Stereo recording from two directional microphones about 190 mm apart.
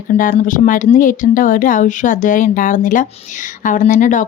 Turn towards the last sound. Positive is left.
turn(degrees=40)  # may be behind; listen again after turning